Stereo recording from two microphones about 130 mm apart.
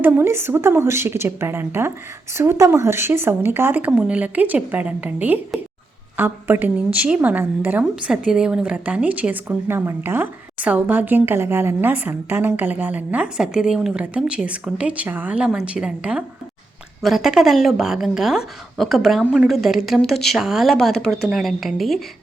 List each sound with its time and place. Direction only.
0.0 s a woman's voice: 20° right (ahead or behind); by 22.0 s centre (ahead or behind)